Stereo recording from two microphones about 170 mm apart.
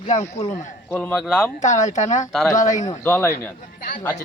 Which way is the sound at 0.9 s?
10° left (ahead or behind).